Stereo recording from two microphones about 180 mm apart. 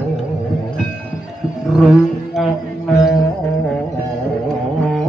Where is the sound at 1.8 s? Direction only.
Centre (ahead or behind).